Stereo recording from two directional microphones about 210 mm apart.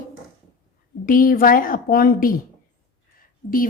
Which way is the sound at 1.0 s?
40° left (ahead or behind).